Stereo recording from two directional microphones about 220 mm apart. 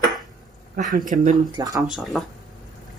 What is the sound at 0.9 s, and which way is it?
Speech, 35° right (ahead or behind).